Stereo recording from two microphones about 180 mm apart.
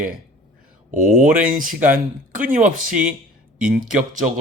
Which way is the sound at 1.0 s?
45° right (ahead or behind).